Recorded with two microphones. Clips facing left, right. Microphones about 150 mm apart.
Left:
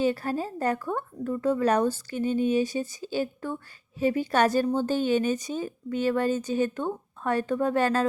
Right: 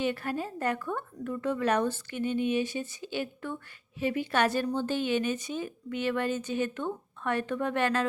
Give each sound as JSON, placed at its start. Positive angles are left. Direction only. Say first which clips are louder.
{"t": 0.0, "sound": "a woman's voice", "louder": "left 5 dB", "side_deg": 35}